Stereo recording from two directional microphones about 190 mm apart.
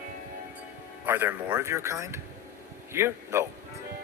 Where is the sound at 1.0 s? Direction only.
10° right (ahead or behind).